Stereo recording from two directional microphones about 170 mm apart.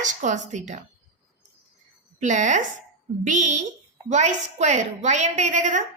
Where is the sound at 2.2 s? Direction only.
45° right (ahead or behind).